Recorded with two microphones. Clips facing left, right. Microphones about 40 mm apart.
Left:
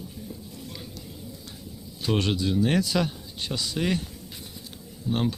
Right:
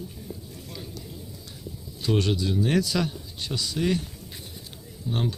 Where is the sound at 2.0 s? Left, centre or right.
Left.